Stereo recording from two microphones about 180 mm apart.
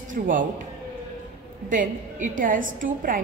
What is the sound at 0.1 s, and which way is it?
Speech, 45° right (ahead or behind).